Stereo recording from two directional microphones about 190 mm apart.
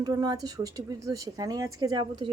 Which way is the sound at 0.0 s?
20° right (ahead or behind).